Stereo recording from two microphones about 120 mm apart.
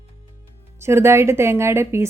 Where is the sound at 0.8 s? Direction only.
20° right (ahead or behind).